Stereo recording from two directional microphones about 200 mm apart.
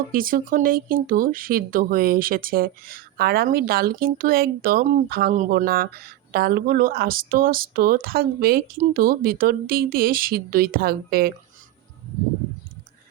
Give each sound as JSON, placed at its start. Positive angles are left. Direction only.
{"t": 0.1, "sound": "speech", "side_deg": -45}